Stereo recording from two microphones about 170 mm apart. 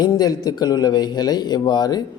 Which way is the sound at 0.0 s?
20° left (ahead or behind).